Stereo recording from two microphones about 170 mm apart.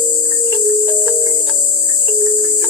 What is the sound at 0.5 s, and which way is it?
Music, 15° right (ahead or behind).